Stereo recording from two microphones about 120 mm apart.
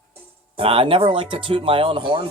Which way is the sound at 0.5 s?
50° right (ahead or behind).